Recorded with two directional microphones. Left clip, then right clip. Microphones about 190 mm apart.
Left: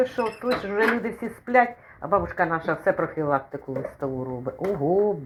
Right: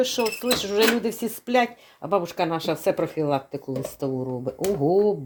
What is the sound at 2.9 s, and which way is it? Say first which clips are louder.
Speech: even; 15° right (ahead or behind).